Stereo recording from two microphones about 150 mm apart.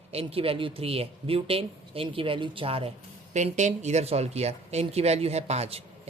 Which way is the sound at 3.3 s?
55° right (ahead or behind).